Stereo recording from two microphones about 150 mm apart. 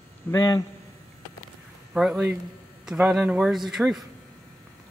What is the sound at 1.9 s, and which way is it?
Speech, centre (ahead or behind).